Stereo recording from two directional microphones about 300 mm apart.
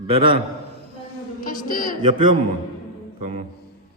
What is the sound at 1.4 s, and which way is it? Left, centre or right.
Speech, left.